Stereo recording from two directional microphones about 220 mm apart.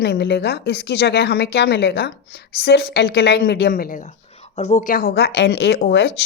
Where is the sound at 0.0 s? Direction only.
50° left (ahead or behind).